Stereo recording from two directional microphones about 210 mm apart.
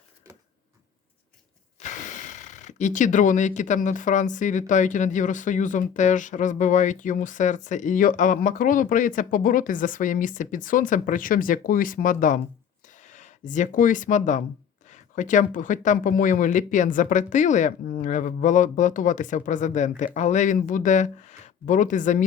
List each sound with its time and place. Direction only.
1.8 s speech: 35° left (ahead or behind)
12.8 s a sound: 35° left (ahead or behind)
14.8 s speech: 35° left (ahead or behind)